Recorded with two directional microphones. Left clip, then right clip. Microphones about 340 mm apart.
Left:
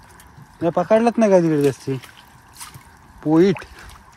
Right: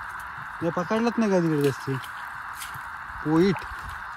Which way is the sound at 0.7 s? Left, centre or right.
Centre.